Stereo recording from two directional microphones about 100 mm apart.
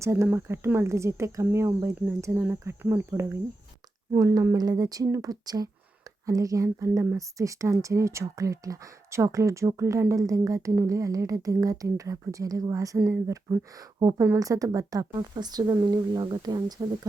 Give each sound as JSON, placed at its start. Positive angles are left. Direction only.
{"t": 0.0, "sound": "speech", "side_deg": -25}